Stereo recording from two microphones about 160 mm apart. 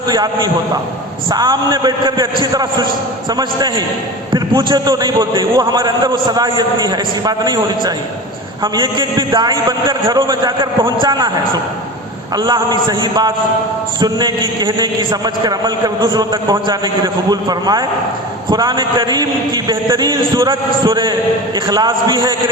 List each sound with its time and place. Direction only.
0.1 s a man's voice: 25° right (ahead or behind)